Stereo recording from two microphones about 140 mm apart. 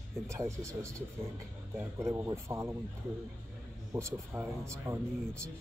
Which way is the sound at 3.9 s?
20° right (ahead or behind).